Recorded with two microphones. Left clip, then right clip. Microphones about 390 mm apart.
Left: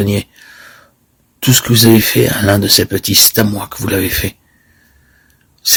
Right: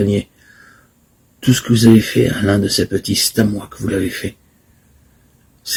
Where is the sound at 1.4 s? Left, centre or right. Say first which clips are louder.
Left 3 dB; left.